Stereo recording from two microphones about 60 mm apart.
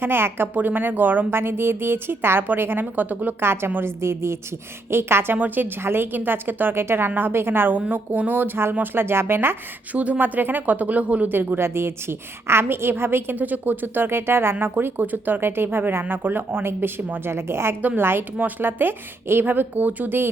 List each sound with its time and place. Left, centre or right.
0.0 s a woman's voice: right
3.4 s a woman's voice: right
7.8 s a woman's voice: right
9.9 s speech: right
11.3 s a woman's voice: right